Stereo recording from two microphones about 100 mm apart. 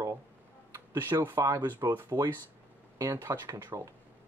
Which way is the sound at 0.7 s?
25° right (ahead or behind).